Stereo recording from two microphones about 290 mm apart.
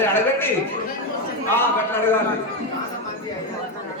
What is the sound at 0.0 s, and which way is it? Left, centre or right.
Speech, centre.